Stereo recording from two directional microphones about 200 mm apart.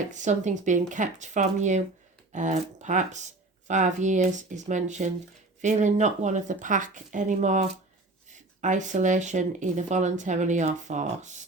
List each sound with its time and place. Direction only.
0.1 s speech: 35° right (ahead or behind)